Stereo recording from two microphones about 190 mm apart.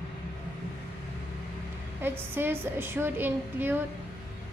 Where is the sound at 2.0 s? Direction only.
10° right (ahead or behind).